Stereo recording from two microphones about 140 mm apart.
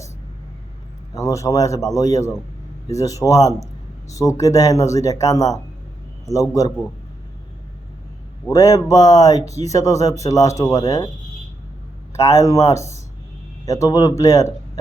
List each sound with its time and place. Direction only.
1.1 s speech: 25° left (ahead or behind)
8.4 s speech: 25° left (ahead or behind)
12.1 s speech: 25° left (ahead or behind)